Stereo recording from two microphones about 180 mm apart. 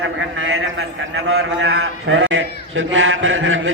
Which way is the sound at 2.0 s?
90° right.